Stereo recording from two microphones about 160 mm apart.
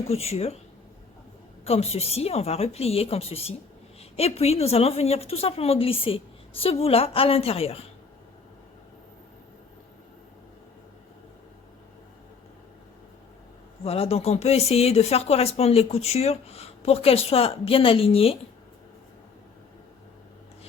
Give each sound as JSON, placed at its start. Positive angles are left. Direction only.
{"t": 0.1, "sound": "speech", "side_deg": 40}
{"t": 1.6, "sound": "speech", "side_deg": 40}
{"t": 13.8, "sound": "speech", "side_deg": 40}